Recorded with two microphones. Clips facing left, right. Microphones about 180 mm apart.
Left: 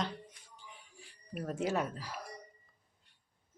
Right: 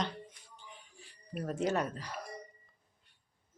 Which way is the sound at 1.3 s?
5° left (ahead or behind).